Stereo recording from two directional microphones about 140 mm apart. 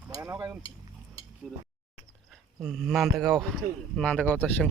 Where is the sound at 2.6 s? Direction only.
Centre (ahead or behind).